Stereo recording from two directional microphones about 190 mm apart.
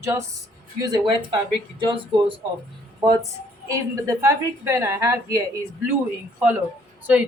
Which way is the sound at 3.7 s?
15° right (ahead or behind).